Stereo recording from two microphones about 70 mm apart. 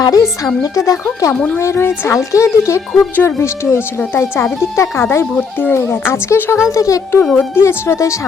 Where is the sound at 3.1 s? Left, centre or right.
Left.